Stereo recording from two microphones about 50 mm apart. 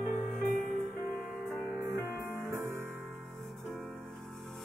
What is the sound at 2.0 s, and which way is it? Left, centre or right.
Music, right.